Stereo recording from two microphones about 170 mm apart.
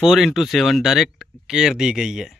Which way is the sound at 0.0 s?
Centre (ahead or behind).